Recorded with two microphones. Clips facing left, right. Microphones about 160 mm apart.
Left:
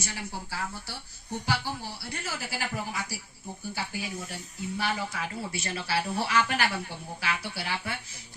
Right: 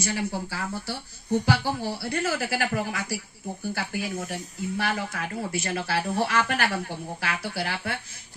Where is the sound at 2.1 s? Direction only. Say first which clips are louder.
Right 9 dB; 70° right (ahead or behind).